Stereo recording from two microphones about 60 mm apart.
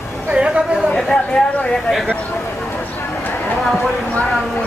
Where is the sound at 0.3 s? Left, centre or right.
Centre.